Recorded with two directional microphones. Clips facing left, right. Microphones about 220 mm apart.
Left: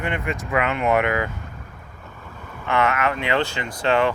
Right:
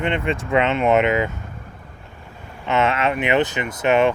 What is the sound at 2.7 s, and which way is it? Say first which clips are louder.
Speech: right 2 dB; 25° right (ahead or behind).